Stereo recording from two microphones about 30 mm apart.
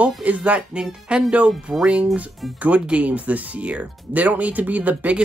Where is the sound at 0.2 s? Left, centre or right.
Right.